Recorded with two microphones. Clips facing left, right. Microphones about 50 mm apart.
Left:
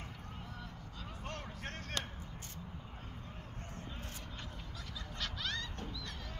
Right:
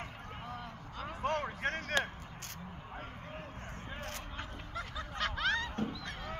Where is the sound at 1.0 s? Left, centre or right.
Right.